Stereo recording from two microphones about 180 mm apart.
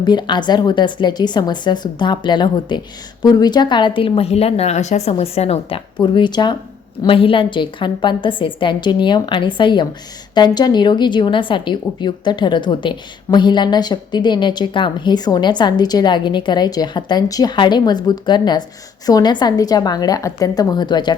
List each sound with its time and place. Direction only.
0.0 s a woman's voice: 25° left (ahead or behind)